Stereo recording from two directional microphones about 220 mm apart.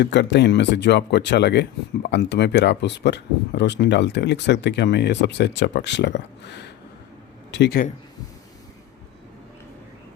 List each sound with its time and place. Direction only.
0.0 s speech: 50° left (ahead or behind)